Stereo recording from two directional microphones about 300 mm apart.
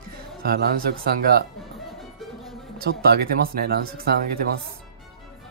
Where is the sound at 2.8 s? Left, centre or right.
Right.